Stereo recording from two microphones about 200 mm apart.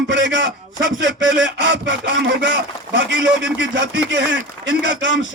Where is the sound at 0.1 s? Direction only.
65° right (ahead or behind).